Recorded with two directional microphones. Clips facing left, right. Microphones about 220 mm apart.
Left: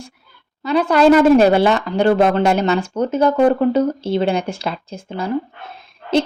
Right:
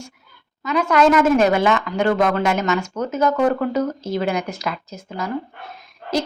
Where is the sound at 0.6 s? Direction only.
35° left (ahead or behind).